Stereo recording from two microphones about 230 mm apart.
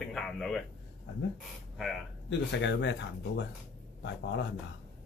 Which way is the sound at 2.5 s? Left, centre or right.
Left.